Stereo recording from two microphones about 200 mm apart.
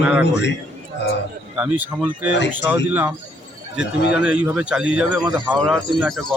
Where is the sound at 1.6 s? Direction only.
5° right (ahead or behind).